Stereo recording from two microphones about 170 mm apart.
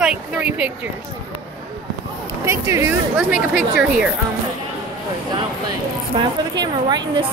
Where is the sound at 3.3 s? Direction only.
5° right (ahead or behind).